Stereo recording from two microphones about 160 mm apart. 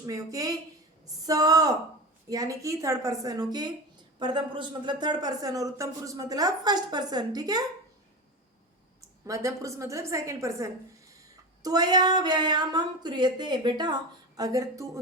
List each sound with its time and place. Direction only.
0.0 s speech: 20° right (ahead or behind)
9.0 s a woman's voice: 20° right (ahead or behind)